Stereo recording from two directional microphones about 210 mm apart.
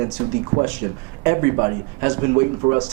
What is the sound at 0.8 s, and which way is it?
A man's voice, 10° right (ahead or behind).